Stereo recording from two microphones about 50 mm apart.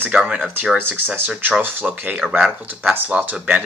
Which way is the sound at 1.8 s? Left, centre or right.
Right.